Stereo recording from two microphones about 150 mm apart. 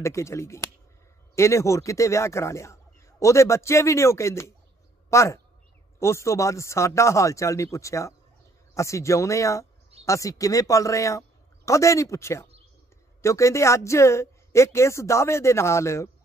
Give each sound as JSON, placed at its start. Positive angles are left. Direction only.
{"t": 0.0, "sound": "a man's voice", "side_deg": 20}